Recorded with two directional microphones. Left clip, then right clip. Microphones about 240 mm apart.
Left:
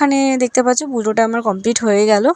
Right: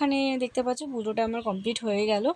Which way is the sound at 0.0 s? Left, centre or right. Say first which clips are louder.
Left 12 dB; left.